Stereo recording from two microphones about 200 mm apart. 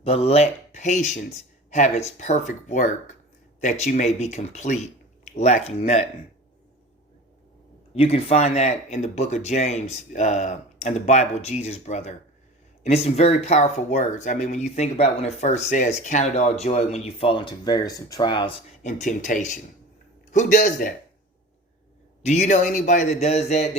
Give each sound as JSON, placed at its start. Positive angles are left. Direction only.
{"t": 0.0, "sound": "speech", "side_deg": 30}
{"t": 7.9, "sound": "speech", "side_deg": 30}
{"t": 18.9, "sound": "speech", "side_deg": 40}
{"t": 22.2, "sound": "speech", "side_deg": 35}